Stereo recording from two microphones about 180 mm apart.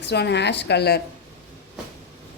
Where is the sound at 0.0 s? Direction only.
70° left (ahead or behind).